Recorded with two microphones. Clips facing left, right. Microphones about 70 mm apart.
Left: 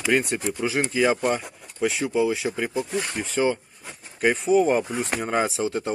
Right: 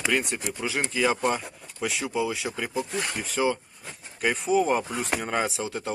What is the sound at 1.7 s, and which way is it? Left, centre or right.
Speech, centre.